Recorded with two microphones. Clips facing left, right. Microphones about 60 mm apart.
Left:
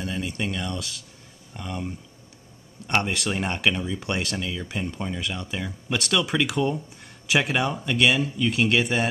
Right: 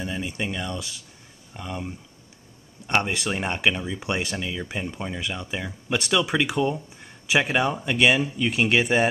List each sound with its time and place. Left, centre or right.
0.0 s speech: centre